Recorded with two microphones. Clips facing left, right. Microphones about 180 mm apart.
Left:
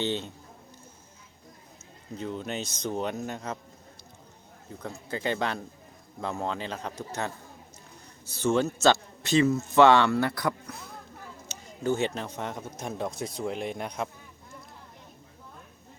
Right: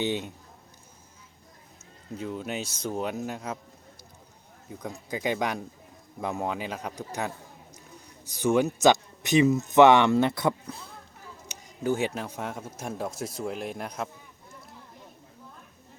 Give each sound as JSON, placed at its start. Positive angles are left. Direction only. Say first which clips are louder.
{"t": 0.0, "sound": "speech", "louder": "right 1 dB", "side_deg": -15}
{"t": 2.1, "sound": "speech", "louder": "even", "side_deg": -5}
{"t": 4.8, "sound": "a man's voice", "louder": "right 1 dB", "side_deg": -15}
{"t": 11.4, "sound": "speech", "louder": "even", "side_deg": -10}